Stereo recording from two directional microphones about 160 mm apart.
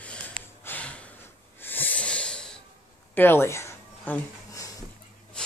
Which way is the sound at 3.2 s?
15° left (ahead or behind).